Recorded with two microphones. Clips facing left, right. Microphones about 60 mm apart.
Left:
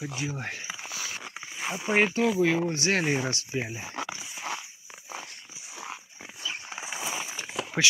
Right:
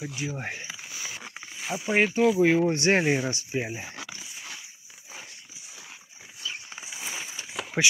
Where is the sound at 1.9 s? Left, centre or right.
Left.